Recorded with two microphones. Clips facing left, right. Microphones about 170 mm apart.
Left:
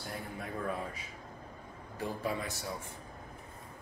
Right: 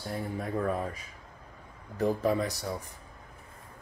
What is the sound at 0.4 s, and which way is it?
Speech, 40° right (ahead or behind).